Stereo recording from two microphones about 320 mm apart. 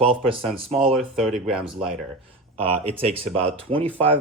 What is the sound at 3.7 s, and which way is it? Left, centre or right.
Speech, centre.